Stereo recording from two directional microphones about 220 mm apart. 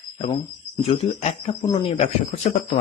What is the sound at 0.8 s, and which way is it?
Speech, 25° left (ahead or behind).